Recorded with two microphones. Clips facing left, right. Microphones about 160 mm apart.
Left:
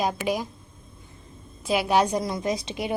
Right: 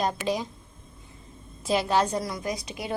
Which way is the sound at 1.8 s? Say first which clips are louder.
Left 3 dB; 15° left (ahead or behind).